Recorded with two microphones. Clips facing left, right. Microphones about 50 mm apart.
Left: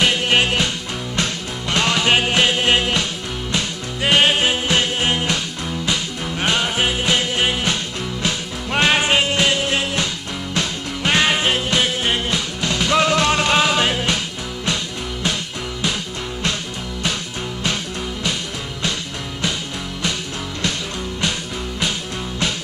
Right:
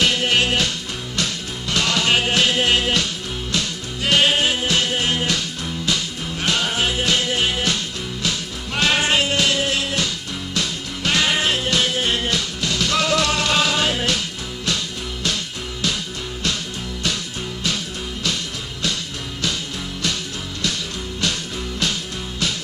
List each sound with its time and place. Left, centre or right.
0.0 s music: left